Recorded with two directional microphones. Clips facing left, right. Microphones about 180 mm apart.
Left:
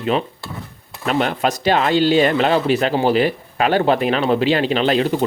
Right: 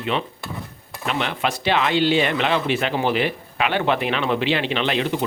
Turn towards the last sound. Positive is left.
turn(degrees=40)  # may be behind; listen again after turning